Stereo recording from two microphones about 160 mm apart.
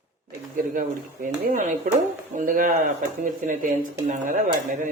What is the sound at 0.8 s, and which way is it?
Speech, 55° right (ahead or behind).